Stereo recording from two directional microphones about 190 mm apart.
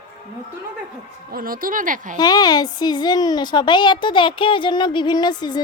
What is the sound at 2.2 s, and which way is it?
Speech, 20° left (ahead or behind).